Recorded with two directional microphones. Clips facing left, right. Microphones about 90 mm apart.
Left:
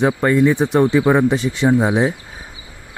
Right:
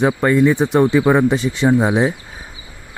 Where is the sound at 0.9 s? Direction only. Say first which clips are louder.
Even; 10° right (ahead or behind).